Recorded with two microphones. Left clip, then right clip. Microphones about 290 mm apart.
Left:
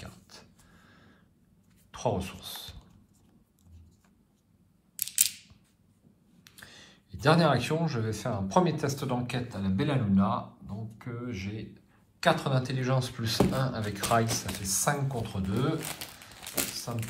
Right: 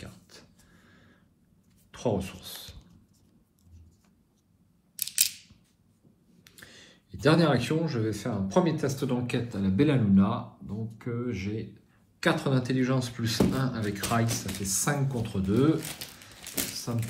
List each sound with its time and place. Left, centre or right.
0.0 s a sound: centre
1.9 s speech: centre
6.4 s speech: centre